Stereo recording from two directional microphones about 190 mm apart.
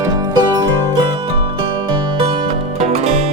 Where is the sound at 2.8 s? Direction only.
35° right (ahead or behind).